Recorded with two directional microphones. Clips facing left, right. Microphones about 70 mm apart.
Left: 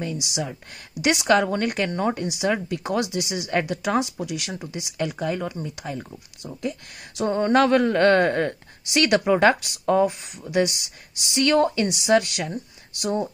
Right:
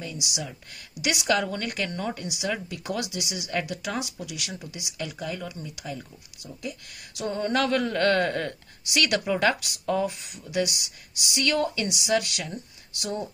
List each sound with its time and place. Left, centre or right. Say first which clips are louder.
0.0 s a woman's voice: left 6 dB; left